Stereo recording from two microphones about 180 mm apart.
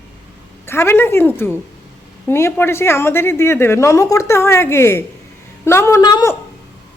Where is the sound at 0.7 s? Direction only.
15° left (ahead or behind).